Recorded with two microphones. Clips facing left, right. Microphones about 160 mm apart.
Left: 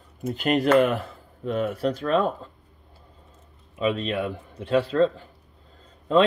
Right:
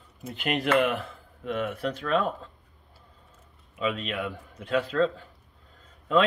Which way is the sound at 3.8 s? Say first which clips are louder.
Left 5 dB; 35° left (ahead or behind).